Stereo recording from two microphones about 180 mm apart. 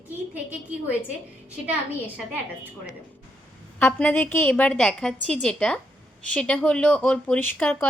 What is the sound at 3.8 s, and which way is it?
A woman's voice, 10° left (ahead or behind).